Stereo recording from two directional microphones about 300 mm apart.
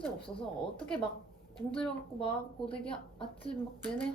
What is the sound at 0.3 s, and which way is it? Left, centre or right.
Speech, centre.